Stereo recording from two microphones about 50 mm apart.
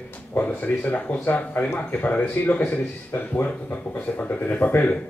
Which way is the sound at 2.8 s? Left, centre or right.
Left.